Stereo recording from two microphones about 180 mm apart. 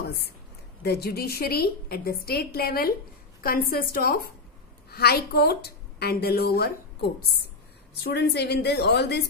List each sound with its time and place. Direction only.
0.8 s a woman's voice: 60° left (ahead or behind)